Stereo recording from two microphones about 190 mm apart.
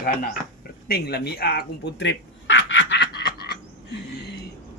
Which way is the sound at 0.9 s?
55° left (ahead or behind).